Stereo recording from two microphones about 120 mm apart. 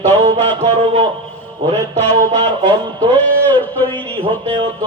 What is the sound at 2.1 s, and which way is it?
Speech, 55° right (ahead or behind).